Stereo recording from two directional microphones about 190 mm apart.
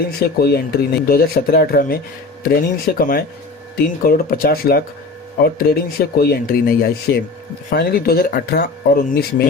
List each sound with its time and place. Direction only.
0.2 s speech: 55° left (ahead or behind)